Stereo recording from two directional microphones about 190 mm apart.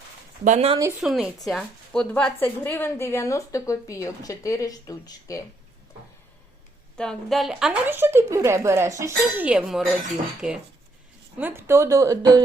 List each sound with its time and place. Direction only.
0.4 s speech: 35° right (ahead or behind)
1.0 s a woman's voice: centre (ahead or behind); by 5.4 s 20° left (ahead or behind)
6.9 s a woman's voice: 5° left (ahead or behind)
10.4 s cutlery: centre (ahead or behind)
11.3 s a woman's voice: 10° right (ahead or behind)